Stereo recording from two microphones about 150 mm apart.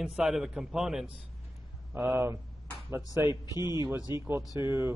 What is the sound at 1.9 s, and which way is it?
Speech, 15° right (ahead or behind).